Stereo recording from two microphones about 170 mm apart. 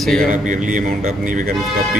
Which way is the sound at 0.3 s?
50° right (ahead or behind).